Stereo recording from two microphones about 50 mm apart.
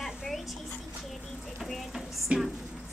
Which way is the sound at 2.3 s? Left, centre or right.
Right.